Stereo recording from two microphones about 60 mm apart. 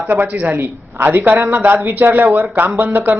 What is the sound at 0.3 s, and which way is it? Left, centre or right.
A man's voice, right.